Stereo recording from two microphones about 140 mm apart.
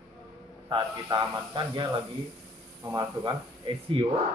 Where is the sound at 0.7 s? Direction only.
30° right (ahead or behind).